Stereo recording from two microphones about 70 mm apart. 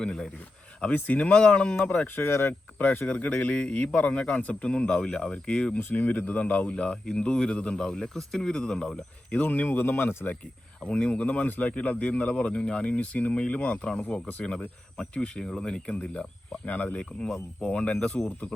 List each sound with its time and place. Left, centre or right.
0.0 s speech: centre
0.8 s speech: left
2.1 s speech: left
3.1 s speech: centre
5.9 s speech: left; by 9.0 s centre
9.3 s speech: left
10.8 s speech: centre